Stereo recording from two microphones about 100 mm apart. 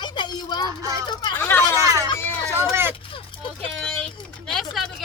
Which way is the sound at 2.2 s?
25° left (ahead or behind).